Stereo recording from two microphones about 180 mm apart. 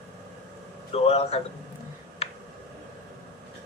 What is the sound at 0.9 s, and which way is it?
Speech, 35° left (ahead or behind).